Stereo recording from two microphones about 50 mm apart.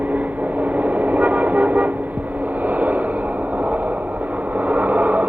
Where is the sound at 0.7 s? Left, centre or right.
Right.